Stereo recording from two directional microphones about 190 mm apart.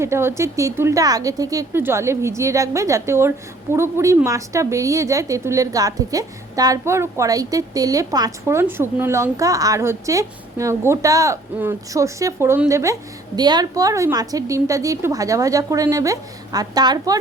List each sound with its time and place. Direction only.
0.0 s speech: 15° right (ahead or behind)